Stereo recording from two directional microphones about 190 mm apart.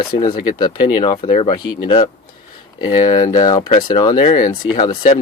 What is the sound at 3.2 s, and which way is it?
Speech, 25° left (ahead or behind).